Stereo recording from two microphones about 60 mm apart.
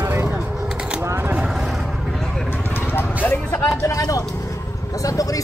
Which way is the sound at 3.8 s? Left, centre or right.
Left.